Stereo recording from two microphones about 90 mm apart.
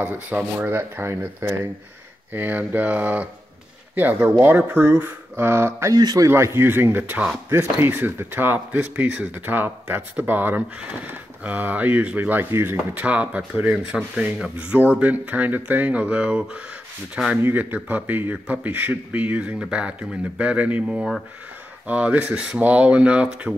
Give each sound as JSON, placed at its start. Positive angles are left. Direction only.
{"t": 0.0, "sound": "speech", "side_deg": -15}
{"t": 0.7, "sound": "speech", "side_deg": -25}
{"t": 2.3, "sound": "speech", "side_deg": -20}
{"t": 5.9, "sound": "speech", "side_deg": -45}
{"t": 12.9, "sound": "speech", "side_deg": -15}
{"t": 17.4, "sound": "speech", "side_deg": -20}